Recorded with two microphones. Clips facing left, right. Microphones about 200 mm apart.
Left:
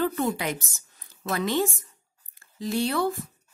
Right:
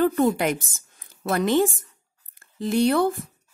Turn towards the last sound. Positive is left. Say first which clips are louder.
# right 6 dB
turn(degrees=-55)  # may be behind; listen again after turning